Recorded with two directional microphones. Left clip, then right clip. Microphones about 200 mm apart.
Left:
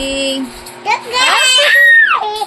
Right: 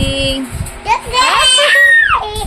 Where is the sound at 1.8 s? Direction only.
5° left (ahead or behind).